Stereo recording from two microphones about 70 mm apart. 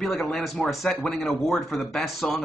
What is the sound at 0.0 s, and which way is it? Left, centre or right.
Speech, centre.